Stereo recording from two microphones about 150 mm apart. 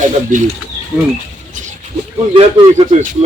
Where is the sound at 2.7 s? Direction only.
65° right (ahead or behind).